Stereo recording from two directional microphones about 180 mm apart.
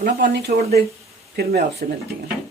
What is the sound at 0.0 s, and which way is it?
Speech, 60° right (ahead or behind).